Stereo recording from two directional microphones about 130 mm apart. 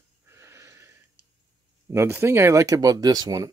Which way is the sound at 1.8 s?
20° right (ahead or behind).